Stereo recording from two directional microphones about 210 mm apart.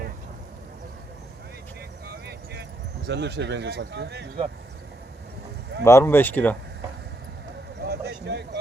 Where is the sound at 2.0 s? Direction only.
50° right (ahead or behind).